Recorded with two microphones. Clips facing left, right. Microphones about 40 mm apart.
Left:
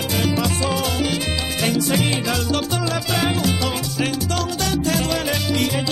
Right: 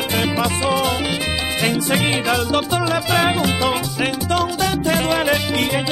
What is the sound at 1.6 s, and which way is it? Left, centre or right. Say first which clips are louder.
Music: right 1 dB; right.